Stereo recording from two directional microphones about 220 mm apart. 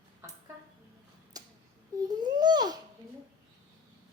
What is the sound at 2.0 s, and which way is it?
Speech, 20° right (ahead or behind).